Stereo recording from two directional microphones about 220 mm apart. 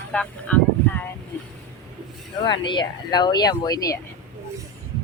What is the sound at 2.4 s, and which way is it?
Speech, 20° left (ahead or behind).